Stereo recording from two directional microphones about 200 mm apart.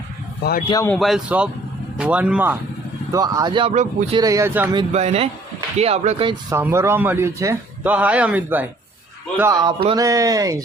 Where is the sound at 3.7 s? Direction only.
35° right (ahead or behind).